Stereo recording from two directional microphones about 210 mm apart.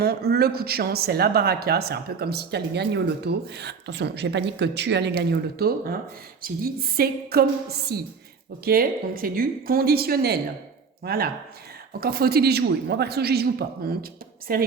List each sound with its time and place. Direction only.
0.0 s speech: 50° right (ahead or behind)